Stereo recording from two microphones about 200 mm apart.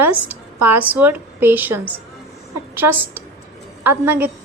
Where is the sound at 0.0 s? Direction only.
10° right (ahead or behind).